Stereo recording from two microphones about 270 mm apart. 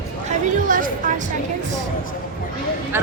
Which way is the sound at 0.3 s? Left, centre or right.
Right.